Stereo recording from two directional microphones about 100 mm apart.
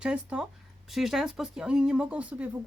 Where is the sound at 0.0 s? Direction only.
10° right (ahead or behind).